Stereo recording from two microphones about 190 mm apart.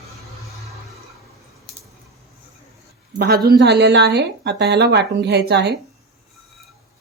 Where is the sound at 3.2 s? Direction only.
55° right (ahead or behind).